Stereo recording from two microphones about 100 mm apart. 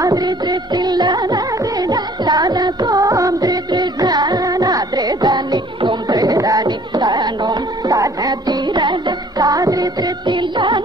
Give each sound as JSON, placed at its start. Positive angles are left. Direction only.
{"t": 0.0, "sound": "music", "side_deg": -40}
{"t": 6.1, "sound": "music", "side_deg": -40}